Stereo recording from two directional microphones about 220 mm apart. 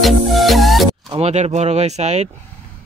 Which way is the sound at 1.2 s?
30° right (ahead or behind).